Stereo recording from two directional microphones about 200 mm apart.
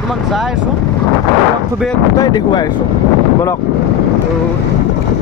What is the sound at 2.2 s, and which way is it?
Speech, 20° left (ahead or behind).